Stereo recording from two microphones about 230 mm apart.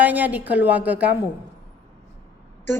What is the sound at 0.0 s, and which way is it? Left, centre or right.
A woman's voice, centre.